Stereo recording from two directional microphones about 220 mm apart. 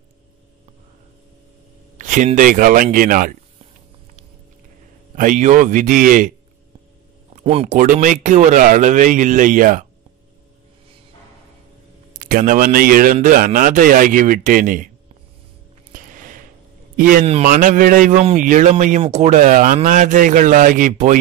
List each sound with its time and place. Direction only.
2.0 s a man's voice: 35° right (ahead or behind)
5.1 s a man's voice: 35° right (ahead or behind)
7.3 s a man's voice: 30° right (ahead or behind)
12.1 s a man's voice: 40° right (ahead or behind)
15.9 s a sound: 35° right (ahead or behind)
16.9 s a man's voice: 40° right (ahead or behind)